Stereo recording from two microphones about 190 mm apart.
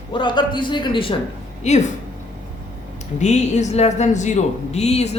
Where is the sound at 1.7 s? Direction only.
35° left (ahead or behind).